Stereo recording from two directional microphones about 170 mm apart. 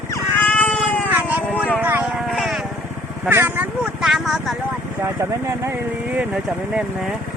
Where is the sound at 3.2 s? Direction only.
10° right (ahead or behind).